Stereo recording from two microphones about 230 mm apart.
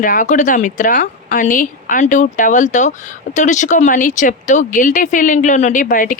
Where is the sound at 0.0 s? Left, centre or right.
Left.